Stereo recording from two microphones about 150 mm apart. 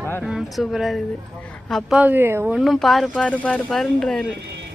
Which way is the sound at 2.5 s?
Centre (ahead or behind).